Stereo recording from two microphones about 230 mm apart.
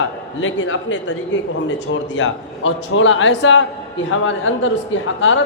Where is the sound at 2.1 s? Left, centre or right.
Left.